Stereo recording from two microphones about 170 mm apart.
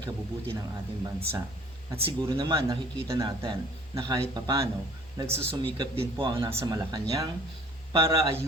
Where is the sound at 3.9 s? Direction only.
25° right (ahead or behind).